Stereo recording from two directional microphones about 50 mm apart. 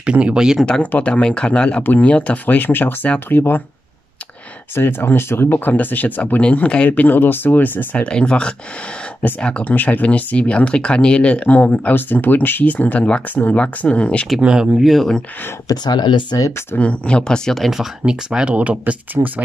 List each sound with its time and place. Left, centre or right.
0.0 s speech: right
0.9 s speech: left
1.8 s speech: left
2.0 s speech: left
2.4 s speech: left
4.7 s speech: left
8.0 s speech: centre
14.4 s speech: centre
14.8 s speech: centre
16.3 s speech: left
16.7 s speech: left
17.5 s speech: centre
18.0 s speech: centre